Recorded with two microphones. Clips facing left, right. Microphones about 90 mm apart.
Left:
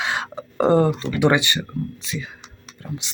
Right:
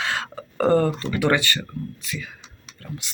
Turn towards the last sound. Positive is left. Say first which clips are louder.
# left 3 dB
turn(degrees=20)  # may be behind; listen again after turning